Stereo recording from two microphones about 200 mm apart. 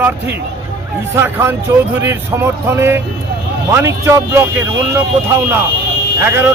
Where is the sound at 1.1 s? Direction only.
10° right (ahead or behind).